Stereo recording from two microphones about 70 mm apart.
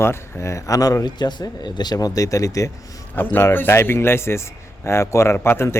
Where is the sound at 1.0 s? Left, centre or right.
Left.